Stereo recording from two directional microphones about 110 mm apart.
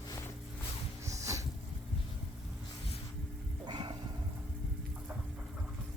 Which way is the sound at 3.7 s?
45° right (ahead or behind).